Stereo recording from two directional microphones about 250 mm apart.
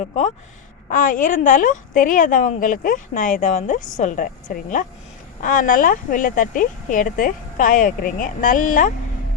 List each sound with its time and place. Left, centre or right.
0.9 s speech: left